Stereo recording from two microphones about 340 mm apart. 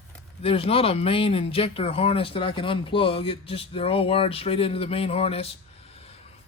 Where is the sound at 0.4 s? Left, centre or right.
Centre.